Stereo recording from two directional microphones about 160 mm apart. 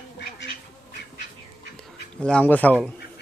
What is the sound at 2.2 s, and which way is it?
Speech, 5° left (ahead or behind).